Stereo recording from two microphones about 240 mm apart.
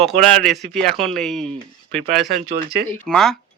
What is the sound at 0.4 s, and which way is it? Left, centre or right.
Speech, centre.